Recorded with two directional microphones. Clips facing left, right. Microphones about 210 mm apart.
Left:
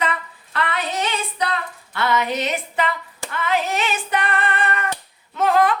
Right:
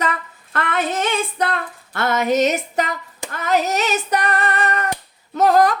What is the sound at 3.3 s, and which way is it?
Hands, 40° right (ahead or behind).